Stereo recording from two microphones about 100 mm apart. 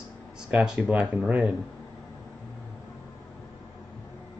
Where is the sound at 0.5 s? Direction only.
10° right (ahead or behind).